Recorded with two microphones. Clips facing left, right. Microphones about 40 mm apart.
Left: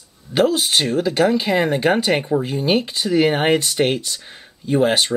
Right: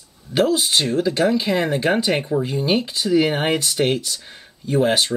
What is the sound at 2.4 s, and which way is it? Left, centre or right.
Speech, left.